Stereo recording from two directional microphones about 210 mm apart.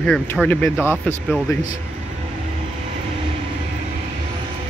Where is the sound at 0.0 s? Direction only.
5° left (ahead or behind).